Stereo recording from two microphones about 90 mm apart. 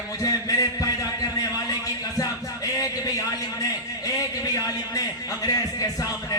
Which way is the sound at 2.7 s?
40° left (ahead or behind).